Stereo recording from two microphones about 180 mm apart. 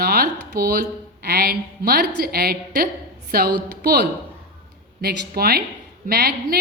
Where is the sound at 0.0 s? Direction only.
60° right (ahead or behind).